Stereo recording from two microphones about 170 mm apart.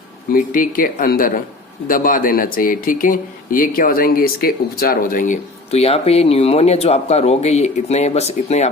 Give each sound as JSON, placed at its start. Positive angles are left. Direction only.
{"t": 0.3, "sound": "speech", "side_deg": 55}